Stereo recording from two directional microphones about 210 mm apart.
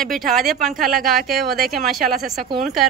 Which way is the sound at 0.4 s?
Centre (ahead or behind).